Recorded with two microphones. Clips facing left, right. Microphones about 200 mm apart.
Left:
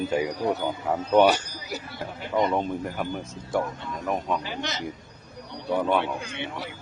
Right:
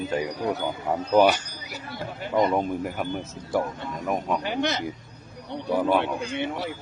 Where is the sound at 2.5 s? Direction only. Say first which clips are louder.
Right 1 dB; 10° right (ahead or behind).